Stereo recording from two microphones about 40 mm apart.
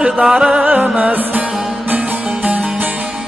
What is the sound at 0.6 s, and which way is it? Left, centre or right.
Music, right.